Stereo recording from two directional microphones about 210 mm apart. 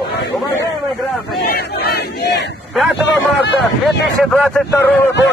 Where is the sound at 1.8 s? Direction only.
55° left (ahead or behind).